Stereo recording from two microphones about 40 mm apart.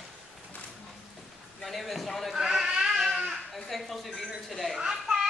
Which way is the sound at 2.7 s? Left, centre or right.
Centre.